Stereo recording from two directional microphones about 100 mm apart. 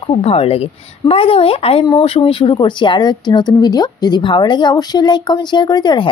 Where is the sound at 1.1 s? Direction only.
70° left (ahead or behind).